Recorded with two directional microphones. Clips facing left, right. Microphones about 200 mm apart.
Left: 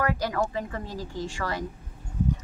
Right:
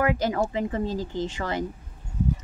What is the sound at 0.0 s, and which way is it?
Speech, 20° right (ahead or behind).